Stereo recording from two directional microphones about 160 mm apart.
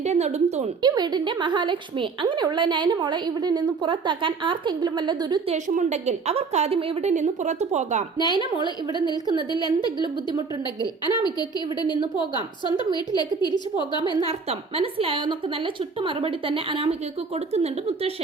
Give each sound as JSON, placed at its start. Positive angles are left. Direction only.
{"t": 0.0, "sound": "a woman's voice", "side_deg": -45}
{"t": 0.8, "sound": "a woman's voice", "side_deg": -25}
{"t": 5.5, "sound": "a woman's voice", "side_deg": -50}
{"t": 8.6, "sound": "a woman's voice", "side_deg": 25}
{"t": 14.3, "sound": "a woman's voice", "side_deg": -40}